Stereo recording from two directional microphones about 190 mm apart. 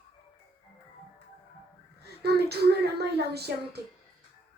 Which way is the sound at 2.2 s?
60° right (ahead or behind).